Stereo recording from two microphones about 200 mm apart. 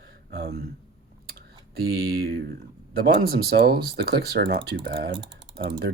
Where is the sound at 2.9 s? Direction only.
50° right (ahead or behind).